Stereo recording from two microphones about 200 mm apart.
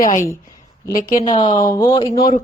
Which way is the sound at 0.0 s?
40° left (ahead or behind).